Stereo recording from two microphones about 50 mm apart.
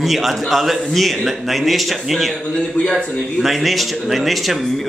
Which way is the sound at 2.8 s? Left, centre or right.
Left.